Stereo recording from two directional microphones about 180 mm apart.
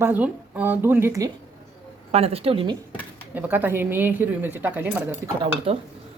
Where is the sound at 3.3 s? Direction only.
10° right (ahead or behind).